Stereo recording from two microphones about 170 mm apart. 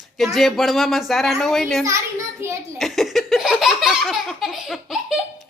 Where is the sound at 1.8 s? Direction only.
15° right (ahead or behind).